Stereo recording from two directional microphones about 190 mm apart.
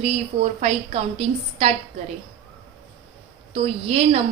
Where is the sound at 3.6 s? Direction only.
30° right (ahead or behind).